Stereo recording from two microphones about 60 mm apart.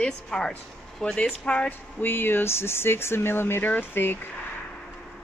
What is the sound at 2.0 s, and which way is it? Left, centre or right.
Speech, left.